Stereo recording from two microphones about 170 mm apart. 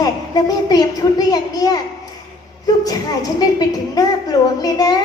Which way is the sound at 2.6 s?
20° left (ahead or behind).